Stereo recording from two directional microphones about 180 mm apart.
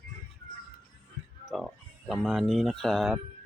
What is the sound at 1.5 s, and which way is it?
Speech, centre (ahead or behind).